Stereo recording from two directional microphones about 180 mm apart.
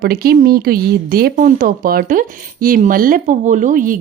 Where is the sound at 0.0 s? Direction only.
55° right (ahead or behind).